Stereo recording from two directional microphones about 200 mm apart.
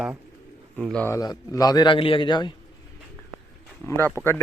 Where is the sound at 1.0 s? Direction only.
15° left (ahead or behind).